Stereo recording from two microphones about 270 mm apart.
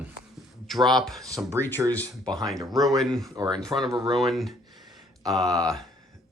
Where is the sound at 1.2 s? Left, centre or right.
Centre.